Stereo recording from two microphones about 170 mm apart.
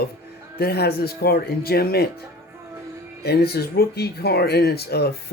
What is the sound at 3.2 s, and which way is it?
Speech, 70° left (ahead or behind).